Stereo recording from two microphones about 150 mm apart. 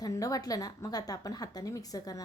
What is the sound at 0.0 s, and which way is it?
A woman's voice, 25° left (ahead or behind).